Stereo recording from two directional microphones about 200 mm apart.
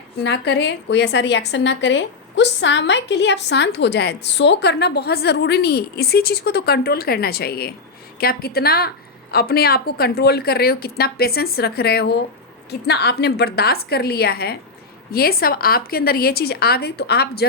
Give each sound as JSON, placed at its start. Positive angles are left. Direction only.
{"t": 0.2, "sound": "a woman's voice", "side_deg": 60}